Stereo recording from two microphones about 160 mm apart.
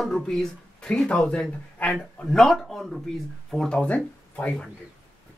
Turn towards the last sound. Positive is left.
turn(degrees=5)  # may be behind; listen again after turning